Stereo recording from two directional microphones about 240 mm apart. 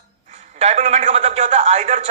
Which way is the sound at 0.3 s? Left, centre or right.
Right.